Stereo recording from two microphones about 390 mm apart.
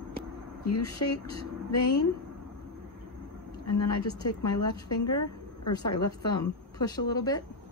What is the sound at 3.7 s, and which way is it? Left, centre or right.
Speech, left.